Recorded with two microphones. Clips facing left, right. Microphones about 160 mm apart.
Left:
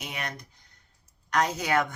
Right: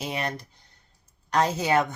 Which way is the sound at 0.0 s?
30° right (ahead or behind).